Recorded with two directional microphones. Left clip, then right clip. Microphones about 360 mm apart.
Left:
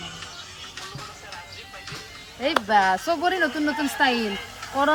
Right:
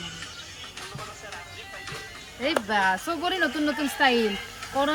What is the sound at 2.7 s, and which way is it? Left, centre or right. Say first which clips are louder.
Speech: left 6 dB; left.